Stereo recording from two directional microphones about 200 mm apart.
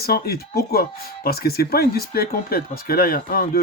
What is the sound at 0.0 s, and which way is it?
Speech, 50° left (ahead or behind).